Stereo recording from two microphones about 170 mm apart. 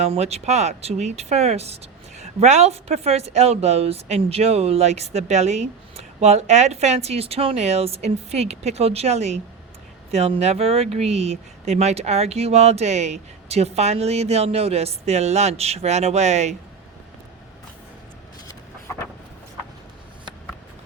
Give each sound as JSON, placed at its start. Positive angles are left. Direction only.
{"t": 0.0, "sound": "speech", "side_deg": -40}